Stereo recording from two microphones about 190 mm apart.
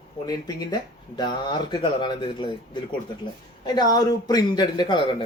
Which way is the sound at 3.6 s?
20° left (ahead or behind).